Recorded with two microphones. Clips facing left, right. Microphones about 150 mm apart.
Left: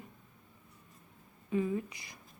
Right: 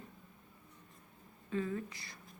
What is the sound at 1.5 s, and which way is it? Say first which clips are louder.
Speech: left 5 dB; 15° left (ahead or behind).